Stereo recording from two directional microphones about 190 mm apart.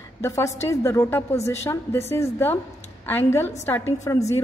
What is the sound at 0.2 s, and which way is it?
A woman's voice, 15° left (ahead or behind).